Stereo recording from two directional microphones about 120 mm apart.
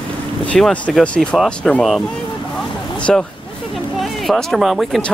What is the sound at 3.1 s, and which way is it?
Speech, 5° left (ahead or behind).